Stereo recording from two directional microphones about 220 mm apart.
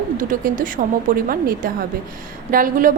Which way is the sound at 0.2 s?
35° right (ahead or behind).